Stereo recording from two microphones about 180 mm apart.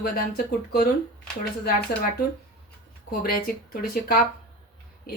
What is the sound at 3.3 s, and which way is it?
Speech, 55° left (ahead or behind).